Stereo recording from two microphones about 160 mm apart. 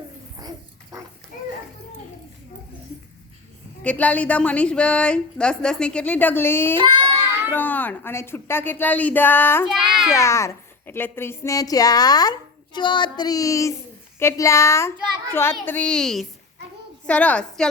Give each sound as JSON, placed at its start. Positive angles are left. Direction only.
{"t": 0.3, "sound": "dog", "side_deg": -25}
{"t": 3.8, "sound": "a woman's voice", "side_deg": 10}